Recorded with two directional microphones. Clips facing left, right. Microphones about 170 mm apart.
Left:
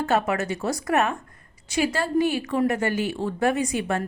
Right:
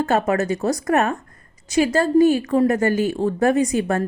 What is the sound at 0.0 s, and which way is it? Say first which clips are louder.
A woman's voice: right 4 dB; 40° right (ahead or behind).